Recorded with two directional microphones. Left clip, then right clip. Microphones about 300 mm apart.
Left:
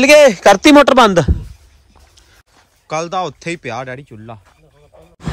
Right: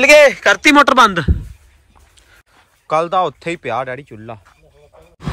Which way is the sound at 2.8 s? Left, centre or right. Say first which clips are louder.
Right 4 dB; centre.